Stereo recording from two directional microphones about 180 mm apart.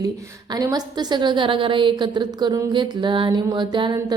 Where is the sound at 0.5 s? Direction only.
20° right (ahead or behind).